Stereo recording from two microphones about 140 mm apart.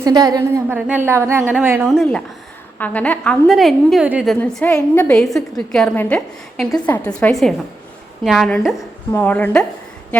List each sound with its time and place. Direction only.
0.0 s a woman's voice: 25° right (ahead or behind)
1.9 s a woman's voice: 5° left (ahead or behind)
4.0 s speech: 10° right (ahead or behind)
4.3 s a woman's voice: 5° left (ahead or behind)
9.1 s a woman's voice: 15° left (ahead or behind)